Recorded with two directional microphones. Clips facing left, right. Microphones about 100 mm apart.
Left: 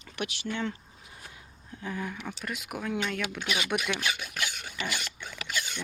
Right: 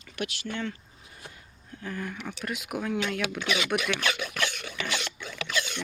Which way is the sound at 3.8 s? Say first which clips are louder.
Right 3 dB; 75° right (ahead or behind).